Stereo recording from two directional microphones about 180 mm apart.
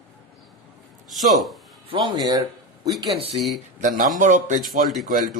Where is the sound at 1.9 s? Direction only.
25° right (ahead or behind).